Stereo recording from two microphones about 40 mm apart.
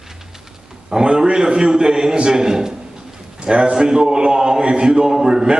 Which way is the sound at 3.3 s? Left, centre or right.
Right.